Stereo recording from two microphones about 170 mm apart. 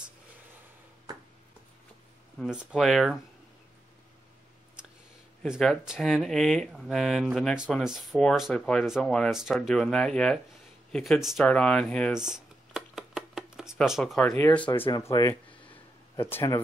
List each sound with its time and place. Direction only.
2.3 s speech: centre (ahead or behind)
5.4 s speech: centre (ahead or behind)
10.9 s a sound: centre (ahead or behind)
14.4 s speech: 5° left (ahead or behind)
14.9 s speech: 20° left (ahead or behind)